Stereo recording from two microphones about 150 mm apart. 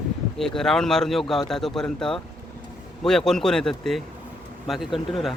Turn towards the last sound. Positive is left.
turn(degrees=0)  # may be behind; listen again after turning